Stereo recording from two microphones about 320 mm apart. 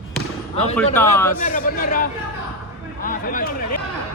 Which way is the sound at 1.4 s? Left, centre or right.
Left.